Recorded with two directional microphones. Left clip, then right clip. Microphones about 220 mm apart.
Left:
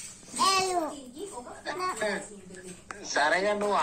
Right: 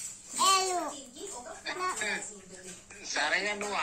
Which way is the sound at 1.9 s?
40° left (ahead or behind).